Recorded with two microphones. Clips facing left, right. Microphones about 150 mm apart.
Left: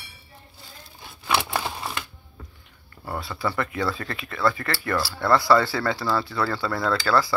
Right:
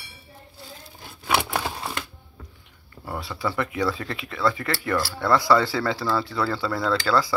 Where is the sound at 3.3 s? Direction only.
15° right (ahead or behind).